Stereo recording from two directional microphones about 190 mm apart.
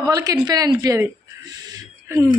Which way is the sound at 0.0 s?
20° right (ahead or behind).